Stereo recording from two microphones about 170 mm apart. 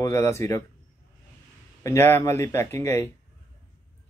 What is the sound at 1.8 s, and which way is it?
Speech, 15° left (ahead or behind).